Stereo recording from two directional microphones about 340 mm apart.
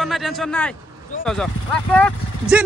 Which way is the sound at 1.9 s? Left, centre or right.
Centre.